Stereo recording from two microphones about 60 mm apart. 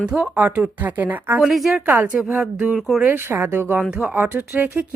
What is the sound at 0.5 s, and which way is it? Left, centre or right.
Speech, right.